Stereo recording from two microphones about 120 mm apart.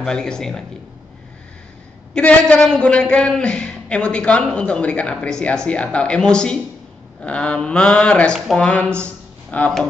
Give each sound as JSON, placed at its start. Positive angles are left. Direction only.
{"t": 0.0, "sound": "a man's voice", "side_deg": 5}
{"t": 2.1, "sound": "a man's voice", "side_deg": 10}